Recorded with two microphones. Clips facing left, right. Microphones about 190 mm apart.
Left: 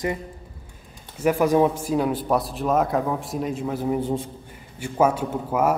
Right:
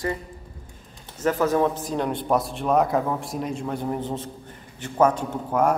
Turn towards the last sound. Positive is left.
turn(degrees=5)  # may be behind; listen again after turning